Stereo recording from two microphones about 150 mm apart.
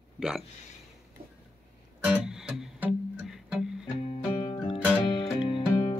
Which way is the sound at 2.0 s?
10° right (ahead or behind).